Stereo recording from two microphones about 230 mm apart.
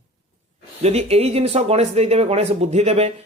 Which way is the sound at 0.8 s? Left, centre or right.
Right.